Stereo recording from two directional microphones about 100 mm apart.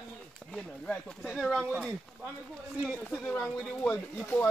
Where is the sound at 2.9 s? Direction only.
10° left (ahead or behind).